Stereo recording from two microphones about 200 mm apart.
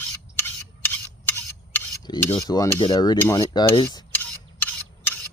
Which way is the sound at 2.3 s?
20° left (ahead or behind).